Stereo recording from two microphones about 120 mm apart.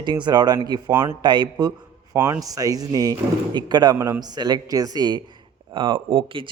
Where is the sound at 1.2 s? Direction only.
40° right (ahead or behind).